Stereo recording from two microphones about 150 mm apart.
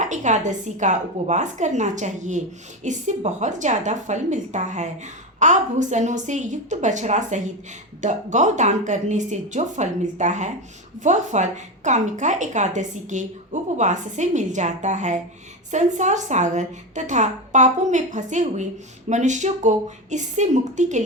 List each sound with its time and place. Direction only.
0.0 s a woman's voice: 55° right (ahead or behind)